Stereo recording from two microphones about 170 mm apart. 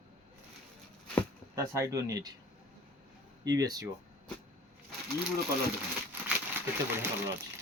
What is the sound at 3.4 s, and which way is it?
Speech, 25° right (ahead or behind).